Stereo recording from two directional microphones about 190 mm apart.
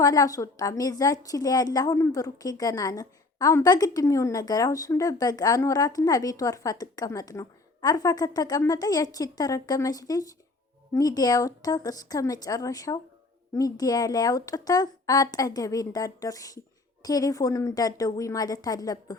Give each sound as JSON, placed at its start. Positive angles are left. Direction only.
{"t": 0.0, "sound": "a woman's voice", "side_deg": 20}